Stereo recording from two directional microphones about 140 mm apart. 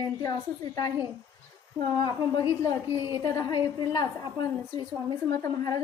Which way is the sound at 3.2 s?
30° left (ahead or behind).